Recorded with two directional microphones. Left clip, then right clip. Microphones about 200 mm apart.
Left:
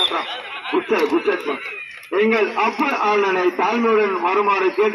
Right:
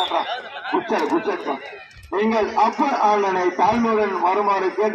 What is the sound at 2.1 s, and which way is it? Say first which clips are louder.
A man's voice: left 3 dB; 45° right (ahead or behind).